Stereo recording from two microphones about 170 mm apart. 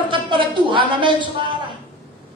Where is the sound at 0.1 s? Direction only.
30° right (ahead or behind).